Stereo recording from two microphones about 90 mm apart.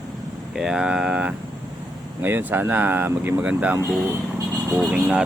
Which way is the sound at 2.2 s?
25° right (ahead or behind).